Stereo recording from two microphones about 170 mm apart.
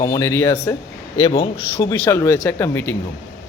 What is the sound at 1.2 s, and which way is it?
Speech, 30° left (ahead or behind).